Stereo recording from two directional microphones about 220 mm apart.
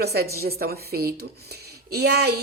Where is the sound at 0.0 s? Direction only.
45° right (ahead or behind).